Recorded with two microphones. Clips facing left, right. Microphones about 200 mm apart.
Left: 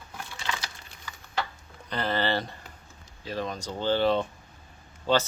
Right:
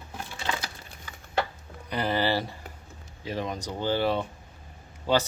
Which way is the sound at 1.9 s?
10° right (ahead or behind).